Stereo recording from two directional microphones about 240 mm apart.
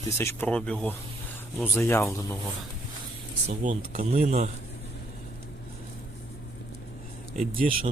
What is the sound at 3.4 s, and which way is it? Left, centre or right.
Speech, right.